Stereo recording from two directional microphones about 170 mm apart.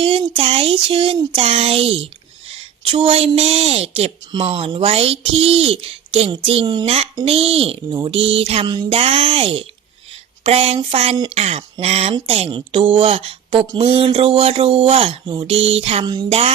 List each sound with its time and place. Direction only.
0.0 s a woman's voice: 35° right (ahead or behind)